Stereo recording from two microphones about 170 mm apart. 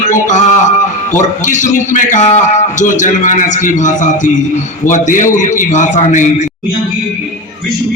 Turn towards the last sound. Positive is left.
turn(degrees=45)  # may be behind; listen again after turning